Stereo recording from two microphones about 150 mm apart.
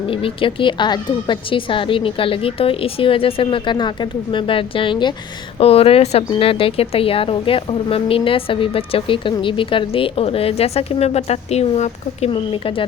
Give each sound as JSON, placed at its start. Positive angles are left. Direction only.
{"t": 0.1, "sound": "speech", "side_deg": 35}